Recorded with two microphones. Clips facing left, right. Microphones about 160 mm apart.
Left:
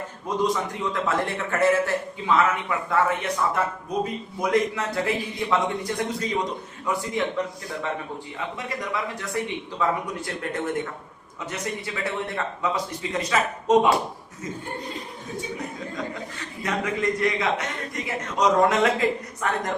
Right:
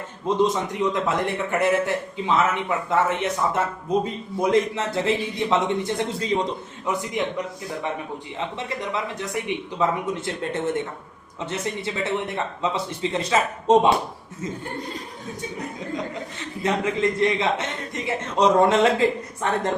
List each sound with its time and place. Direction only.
0.3 s a man's voice: 25° right (ahead or behind)
8.4 s a man's voice: 25° right (ahead or behind)
16.4 s a man's voice: 25° right (ahead or behind)